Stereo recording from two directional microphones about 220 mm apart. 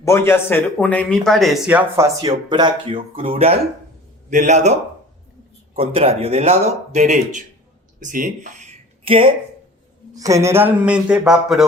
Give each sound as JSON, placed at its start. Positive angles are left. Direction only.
{"t": 0.0, "sound": "a man's voice", "side_deg": 10}
{"t": 5.7, "sound": "a man's voice", "side_deg": -25}